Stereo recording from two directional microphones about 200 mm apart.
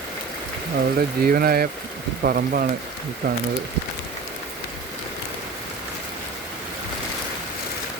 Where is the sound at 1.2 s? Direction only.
50° right (ahead or behind).